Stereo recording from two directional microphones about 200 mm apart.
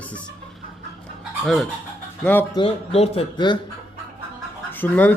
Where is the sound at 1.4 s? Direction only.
Centre (ahead or behind).